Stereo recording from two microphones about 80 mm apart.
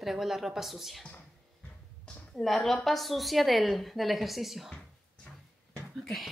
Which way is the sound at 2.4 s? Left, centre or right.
Centre.